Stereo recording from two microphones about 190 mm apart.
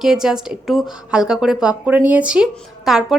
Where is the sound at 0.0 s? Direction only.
5° right (ahead or behind).